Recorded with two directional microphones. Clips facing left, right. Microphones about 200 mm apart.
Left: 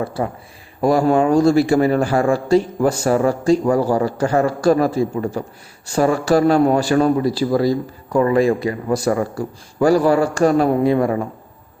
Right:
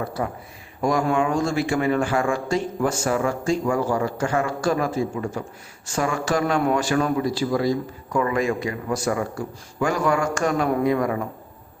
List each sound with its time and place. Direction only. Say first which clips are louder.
0.0 s a man's voice: left 4 dB; 30° left (ahead or behind)